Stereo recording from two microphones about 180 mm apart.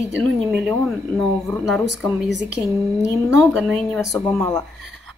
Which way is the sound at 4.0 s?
15° left (ahead or behind).